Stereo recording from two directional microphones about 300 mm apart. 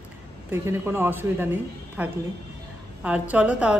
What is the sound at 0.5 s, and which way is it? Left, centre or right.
Speech, centre.